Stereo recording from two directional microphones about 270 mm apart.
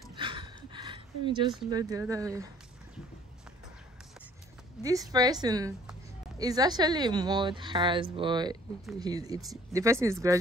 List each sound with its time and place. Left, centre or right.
0.1 s a sound: centre
1.7 s speech: centre
4.8 s speech: centre